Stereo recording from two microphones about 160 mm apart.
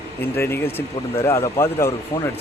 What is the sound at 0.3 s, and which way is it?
Speech, 15° left (ahead or behind).